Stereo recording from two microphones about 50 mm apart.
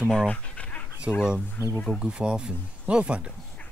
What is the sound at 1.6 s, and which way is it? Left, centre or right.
Speech, right.